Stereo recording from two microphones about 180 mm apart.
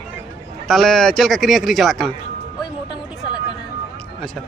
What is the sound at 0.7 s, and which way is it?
A man's voice, centre (ahead or behind).